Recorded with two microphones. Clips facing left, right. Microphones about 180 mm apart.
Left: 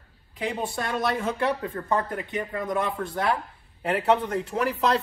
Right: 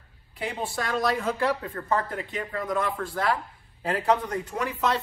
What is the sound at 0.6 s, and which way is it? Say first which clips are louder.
Speech: right 2 dB; 20° left (ahead or behind).